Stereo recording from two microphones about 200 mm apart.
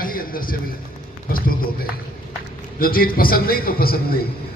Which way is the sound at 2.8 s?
45° left (ahead or behind).